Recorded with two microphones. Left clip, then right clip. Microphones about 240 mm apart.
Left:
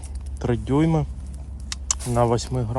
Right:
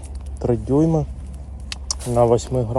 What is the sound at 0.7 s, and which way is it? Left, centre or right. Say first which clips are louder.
Speech: right 3 dB; left.